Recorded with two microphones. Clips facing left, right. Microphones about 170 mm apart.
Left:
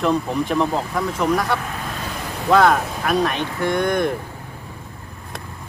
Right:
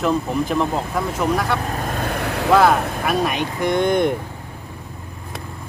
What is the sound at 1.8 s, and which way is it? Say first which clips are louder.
Vehicle: right 5 dB; 55° right (ahead or behind).